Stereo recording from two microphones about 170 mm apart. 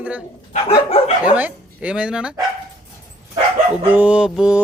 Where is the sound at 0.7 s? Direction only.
35° left (ahead or behind).